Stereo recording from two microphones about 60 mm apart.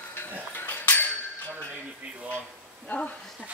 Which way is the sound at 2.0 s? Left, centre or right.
Right.